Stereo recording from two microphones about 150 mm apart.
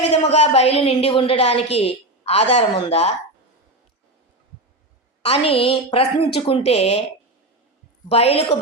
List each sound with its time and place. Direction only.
0.3 s a woman's voice: 45° left (ahead or behind)
5.2 s a woman's voice: 40° left (ahead or behind)
8.1 s a woman's voice: 40° left (ahead or behind)